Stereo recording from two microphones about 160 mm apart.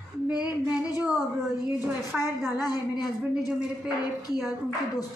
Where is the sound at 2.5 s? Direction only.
25° left (ahead or behind).